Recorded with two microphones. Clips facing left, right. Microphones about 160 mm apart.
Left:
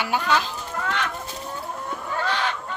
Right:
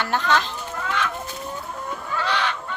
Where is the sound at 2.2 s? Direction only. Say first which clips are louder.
Right 1 dB; 45° left (ahead or behind).